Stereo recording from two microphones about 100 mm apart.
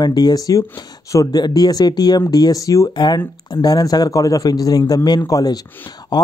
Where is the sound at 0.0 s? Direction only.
45° left (ahead or behind).